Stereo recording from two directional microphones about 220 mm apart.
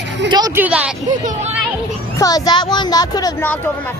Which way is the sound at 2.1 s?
15° left (ahead or behind).